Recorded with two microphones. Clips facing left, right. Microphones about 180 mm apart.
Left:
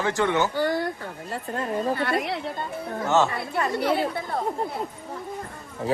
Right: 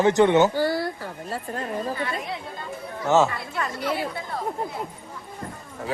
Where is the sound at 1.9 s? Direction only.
70° left (ahead or behind).